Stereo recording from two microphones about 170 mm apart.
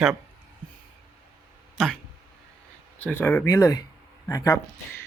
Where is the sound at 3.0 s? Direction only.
10° left (ahead or behind).